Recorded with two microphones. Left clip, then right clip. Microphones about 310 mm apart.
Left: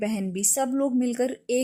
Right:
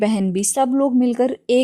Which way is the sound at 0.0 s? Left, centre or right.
Right.